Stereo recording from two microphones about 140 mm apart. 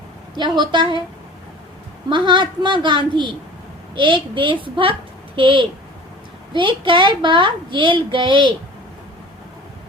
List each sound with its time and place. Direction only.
0.3 s a child's voice: 30° right (ahead or behind)
2.0 s a child's voice: 35° right (ahead or behind)